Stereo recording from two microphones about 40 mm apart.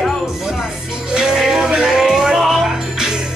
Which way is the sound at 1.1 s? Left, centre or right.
Centre.